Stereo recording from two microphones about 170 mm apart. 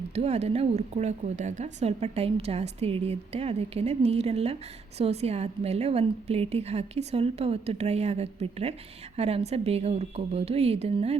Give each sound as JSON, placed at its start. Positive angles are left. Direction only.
{"t": 0.1, "sound": "a woman's voice", "side_deg": -40}